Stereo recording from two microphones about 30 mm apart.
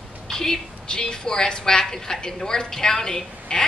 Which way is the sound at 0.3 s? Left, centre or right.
Centre.